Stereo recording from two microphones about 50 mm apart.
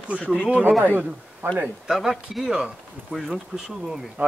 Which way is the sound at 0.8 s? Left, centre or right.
Right.